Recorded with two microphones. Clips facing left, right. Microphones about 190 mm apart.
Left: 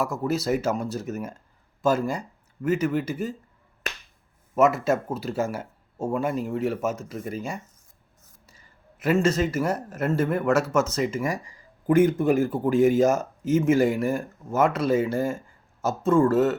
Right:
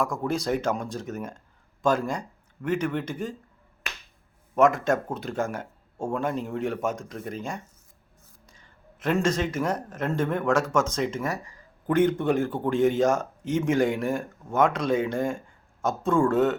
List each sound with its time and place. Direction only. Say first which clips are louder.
0.0 s speech: left 1 dB; 5° left (ahead or behind)
4.5 s a man's voice: even; 5° left (ahead or behind)